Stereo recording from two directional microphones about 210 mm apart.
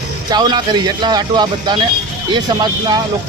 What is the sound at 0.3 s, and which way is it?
Speech, 20° right (ahead or behind).